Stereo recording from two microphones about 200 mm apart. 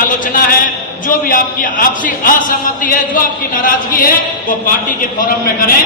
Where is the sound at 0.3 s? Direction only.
45° left (ahead or behind).